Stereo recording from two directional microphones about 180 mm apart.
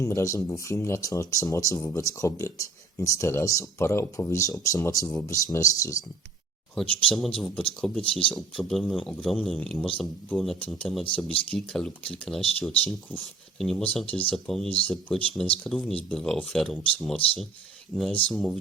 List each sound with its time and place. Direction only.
0.0 s speech: 15° left (ahead or behind)
6.7 s speech: centre (ahead or behind)